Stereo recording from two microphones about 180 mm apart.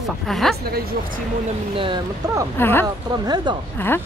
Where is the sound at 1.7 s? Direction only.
30° right (ahead or behind).